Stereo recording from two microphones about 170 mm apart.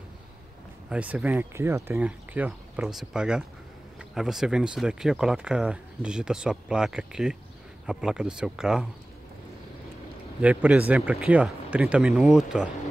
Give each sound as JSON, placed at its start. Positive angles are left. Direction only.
{"t": 0.8, "sound": "speech", "side_deg": -10}
{"t": 10.4, "sound": "speech", "side_deg": -10}